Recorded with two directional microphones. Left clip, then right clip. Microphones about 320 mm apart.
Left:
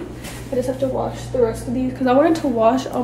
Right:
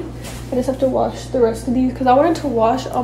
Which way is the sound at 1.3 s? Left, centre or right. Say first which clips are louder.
Right 2 dB; right.